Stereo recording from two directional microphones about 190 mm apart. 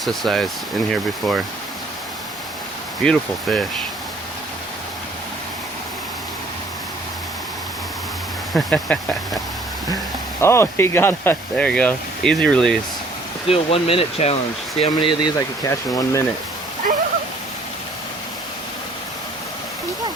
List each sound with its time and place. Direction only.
0.0 s speech: centre (ahead or behind)
3.0 s speech: 5° left (ahead or behind)
8.5 s speech: 5° left (ahead or behind)
10.4 s speech: 15° left (ahead or behind)
13.5 s speech: 30° left (ahead or behind)